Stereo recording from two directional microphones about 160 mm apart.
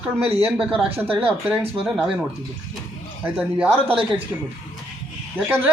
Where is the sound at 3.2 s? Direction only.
5° right (ahead or behind).